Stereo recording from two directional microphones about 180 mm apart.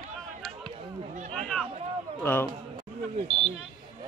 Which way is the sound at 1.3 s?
5° left (ahead or behind).